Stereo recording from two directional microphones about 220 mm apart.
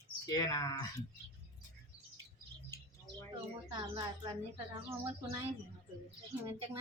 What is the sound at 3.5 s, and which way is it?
Speech, 20° right (ahead or behind).